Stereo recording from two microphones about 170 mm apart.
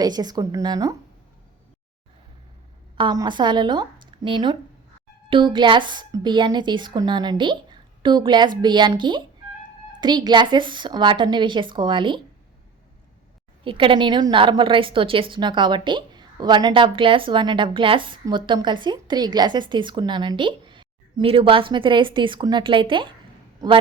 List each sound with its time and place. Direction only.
0.0 s a woman's voice: 25° right (ahead or behind)
3.0 s a woman's voice: 25° right (ahead or behind)
13.7 s a woman's voice: 30° right (ahead or behind)